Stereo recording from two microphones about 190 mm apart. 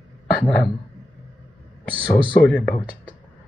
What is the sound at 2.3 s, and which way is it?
Speech, 5° left (ahead or behind).